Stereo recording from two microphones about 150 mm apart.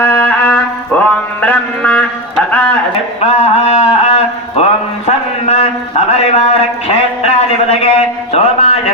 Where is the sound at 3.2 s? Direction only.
45° left (ahead or behind).